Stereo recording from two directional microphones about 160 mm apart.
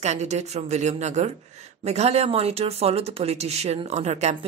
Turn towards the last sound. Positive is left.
turn(degrees=-45)  # may be behind; listen again after turning